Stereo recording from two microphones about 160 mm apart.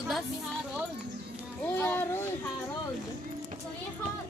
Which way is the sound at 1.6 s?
15° left (ahead or behind).